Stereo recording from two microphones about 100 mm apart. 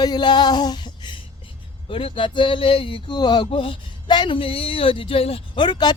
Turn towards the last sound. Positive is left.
turn(degrees=45)  # may be behind; listen again after turning